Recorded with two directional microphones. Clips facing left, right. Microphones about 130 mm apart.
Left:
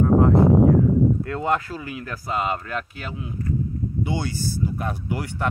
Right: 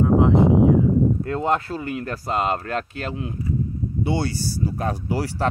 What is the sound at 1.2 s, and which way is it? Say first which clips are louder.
Speech: right 2 dB; 30° right (ahead or behind).